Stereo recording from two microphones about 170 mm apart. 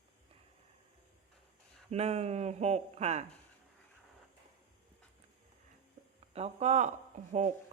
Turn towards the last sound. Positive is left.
turn(degrees=-45)  # may be behind; listen again after turning